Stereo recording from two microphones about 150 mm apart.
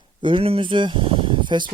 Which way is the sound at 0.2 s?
35° right (ahead or behind).